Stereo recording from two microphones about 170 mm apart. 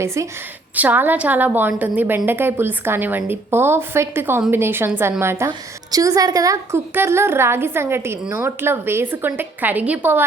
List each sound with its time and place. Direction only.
0.0 s a woman's voice: 15° right (ahead or behind)